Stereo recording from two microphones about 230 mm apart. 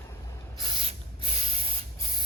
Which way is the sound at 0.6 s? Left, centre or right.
Right.